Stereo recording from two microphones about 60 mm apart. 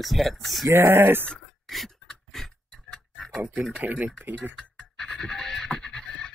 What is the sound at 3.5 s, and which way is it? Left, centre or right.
Speech, centre.